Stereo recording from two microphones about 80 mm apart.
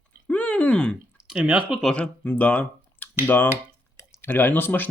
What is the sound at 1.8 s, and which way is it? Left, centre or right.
Speech, centre.